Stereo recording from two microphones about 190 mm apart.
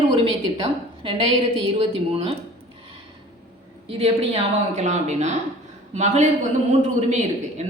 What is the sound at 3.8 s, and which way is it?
A woman's voice, 30° right (ahead or behind).